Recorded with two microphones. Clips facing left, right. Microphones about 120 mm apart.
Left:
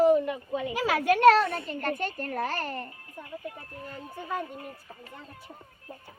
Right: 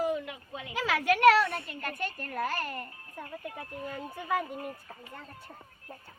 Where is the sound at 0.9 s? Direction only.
40° left (ahead or behind).